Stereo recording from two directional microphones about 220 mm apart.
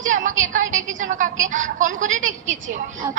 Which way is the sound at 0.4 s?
35° right (ahead or behind).